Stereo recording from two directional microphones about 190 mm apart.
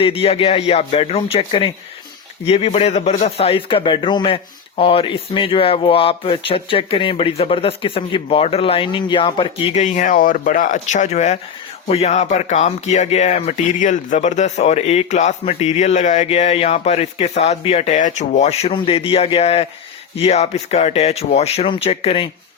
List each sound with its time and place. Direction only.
0.0 s speech: 30° left (ahead or behind)